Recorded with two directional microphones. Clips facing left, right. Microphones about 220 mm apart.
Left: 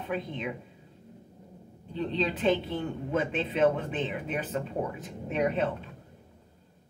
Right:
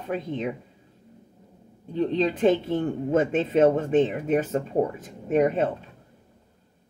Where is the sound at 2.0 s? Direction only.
45° right (ahead or behind).